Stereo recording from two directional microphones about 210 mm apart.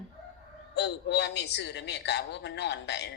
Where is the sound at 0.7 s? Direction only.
55° left (ahead or behind).